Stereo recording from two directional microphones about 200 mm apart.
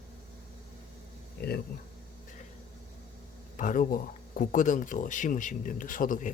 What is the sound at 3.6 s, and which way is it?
Speech, 40° left (ahead or behind).